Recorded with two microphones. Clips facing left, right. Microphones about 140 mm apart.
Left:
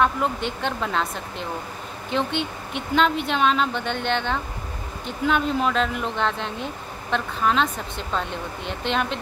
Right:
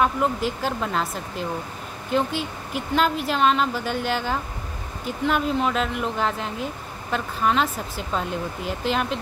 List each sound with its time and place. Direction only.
0.0 s speech: 5° right (ahead or behind)